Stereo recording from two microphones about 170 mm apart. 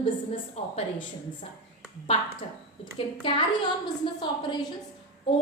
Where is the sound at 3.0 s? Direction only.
30° left (ahead or behind).